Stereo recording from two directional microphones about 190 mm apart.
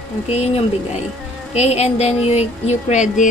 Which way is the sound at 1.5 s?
35° left (ahead or behind).